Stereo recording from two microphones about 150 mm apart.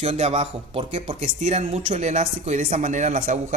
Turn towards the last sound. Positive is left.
turn(degrees=-60)  # may be behind; listen again after turning